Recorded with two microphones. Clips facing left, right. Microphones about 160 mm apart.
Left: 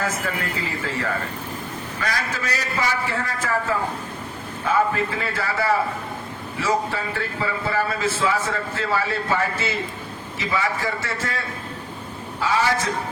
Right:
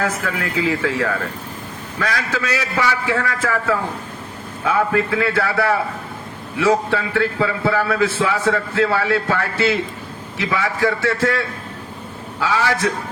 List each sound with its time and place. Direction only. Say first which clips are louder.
0.0 s a man's voice: right 3 dB; 80° right